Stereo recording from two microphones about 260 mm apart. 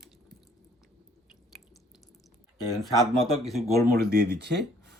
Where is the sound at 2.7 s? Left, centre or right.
Centre.